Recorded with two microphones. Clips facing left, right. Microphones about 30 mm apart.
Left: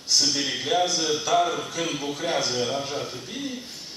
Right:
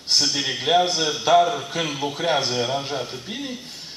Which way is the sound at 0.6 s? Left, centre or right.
Right.